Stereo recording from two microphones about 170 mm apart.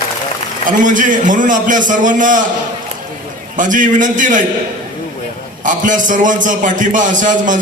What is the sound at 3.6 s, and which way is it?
Speech, 50° right (ahead or behind).